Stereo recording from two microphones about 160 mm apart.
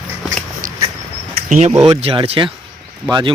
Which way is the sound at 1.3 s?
45° right (ahead or behind).